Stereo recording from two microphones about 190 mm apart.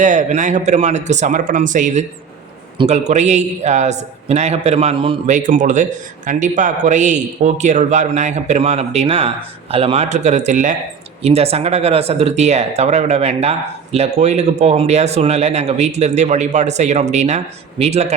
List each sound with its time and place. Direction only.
0.0 s speech: 40° right (ahead or behind)
5.2 s speech: 40° right (ahead or behind)